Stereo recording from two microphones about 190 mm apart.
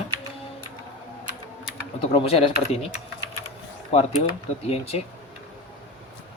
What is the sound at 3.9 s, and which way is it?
Mantra, 30° left (ahead or behind).